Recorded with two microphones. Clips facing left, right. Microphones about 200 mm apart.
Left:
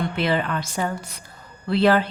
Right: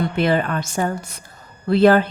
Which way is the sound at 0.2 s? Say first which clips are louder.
Right 4 dB; 50° right (ahead or behind).